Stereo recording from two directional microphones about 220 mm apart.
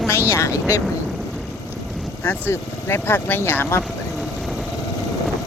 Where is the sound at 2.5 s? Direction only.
10° left (ahead or behind).